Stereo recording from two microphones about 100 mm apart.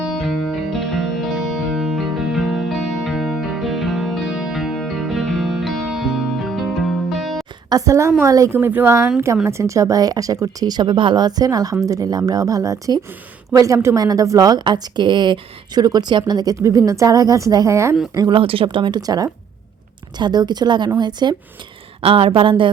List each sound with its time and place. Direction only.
0.0 s music: centre (ahead or behind)
7.7 s a woman's voice: 35° right (ahead or behind)
8.5 s a woman's voice: 20° right (ahead or behind)
18.3 s a woman's voice: 65° right (ahead or behind); by 21.3 s 45° right (ahead or behind)
22.0 s speech: 70° right (ahead or behind)